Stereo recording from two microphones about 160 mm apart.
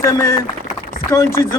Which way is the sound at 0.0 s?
20° left (ahead or behind).